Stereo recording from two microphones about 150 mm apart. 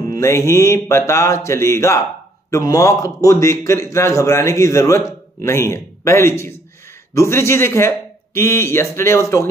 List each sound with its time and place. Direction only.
0.0 s a man's voice: 20° left (ahead or behind)